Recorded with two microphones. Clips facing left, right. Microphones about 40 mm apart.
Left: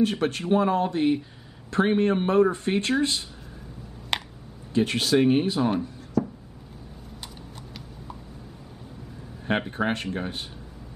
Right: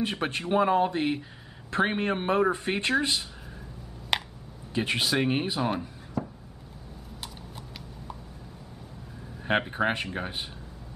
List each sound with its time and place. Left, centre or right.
0.0 s a man's voice: centre
4.1 s a sound: centre
4.7 s speech: centre
9.5 s speech: centre